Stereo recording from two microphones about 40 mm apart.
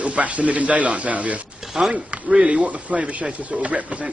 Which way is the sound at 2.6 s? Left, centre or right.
Right.